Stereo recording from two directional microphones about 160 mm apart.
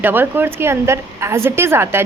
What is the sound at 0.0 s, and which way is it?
Speech, 15° right (ahead or behind).